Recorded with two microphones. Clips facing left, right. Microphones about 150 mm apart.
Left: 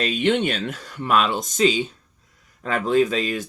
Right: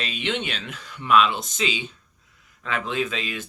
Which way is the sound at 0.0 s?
45° left (ahead or behind).